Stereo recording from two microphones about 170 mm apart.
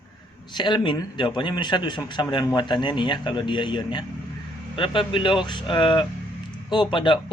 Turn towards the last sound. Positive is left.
turn(degrees=30)  # may be behind; listen again after turning